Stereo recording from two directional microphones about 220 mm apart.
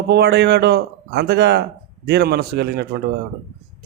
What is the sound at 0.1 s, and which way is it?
Speech, 50° right (ahead or behind).